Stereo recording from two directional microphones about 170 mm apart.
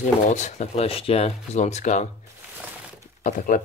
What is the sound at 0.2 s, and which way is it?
Speech, 45° left (ahead or behind).